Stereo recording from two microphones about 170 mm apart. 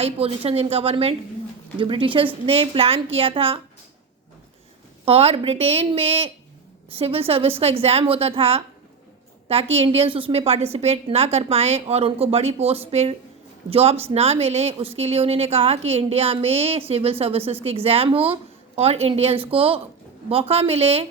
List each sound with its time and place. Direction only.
0.0 s a woman's voice: 35° right (ahead or behind)
5.0 s a woman's voice: 35° right (ahead or behind)